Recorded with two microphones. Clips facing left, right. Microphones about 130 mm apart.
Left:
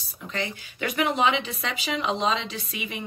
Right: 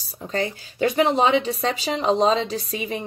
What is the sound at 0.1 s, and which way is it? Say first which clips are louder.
A woman's voice: right 6 dB; 35° right (ahead or behind).